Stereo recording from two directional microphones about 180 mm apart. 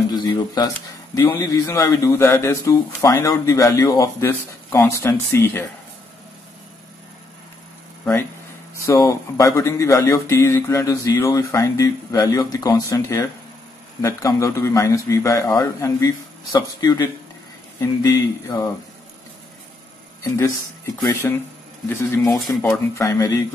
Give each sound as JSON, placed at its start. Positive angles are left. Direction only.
{"t": 0.3, "sound": "speech", "side_deg": 15}
{"t": 8.0, "sound": "speech", "side_deg": 15}
{"t": 21.1, "sound": "speech", "side_deg": 15}